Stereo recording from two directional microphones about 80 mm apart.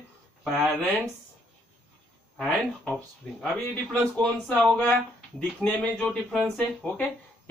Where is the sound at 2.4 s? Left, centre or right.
Centre.